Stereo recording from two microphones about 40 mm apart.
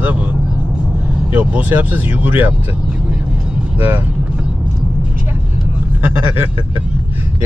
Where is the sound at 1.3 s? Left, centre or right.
Right.